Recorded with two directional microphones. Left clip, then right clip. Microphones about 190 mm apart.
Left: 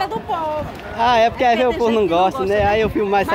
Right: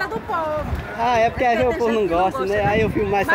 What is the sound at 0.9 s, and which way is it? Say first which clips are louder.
Speech: left 3 dB; 10° left (ahead or behind).